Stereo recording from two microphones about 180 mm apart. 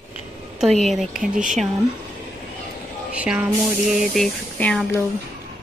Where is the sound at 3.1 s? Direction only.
5° right (ahead or behind).